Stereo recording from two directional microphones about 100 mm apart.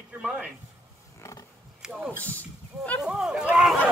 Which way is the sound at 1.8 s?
5° right (ahead or behind).